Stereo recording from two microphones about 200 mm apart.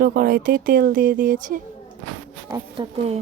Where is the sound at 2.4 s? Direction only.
20° right (ahead or behind).